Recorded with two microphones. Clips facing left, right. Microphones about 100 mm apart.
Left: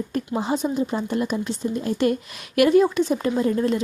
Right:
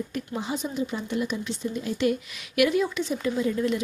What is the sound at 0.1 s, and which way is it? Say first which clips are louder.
Speech: left 6 dB; 45° left (ahead or behind).